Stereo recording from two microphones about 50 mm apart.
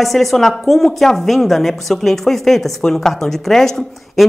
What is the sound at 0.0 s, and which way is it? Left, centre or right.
A woman's voice, centre.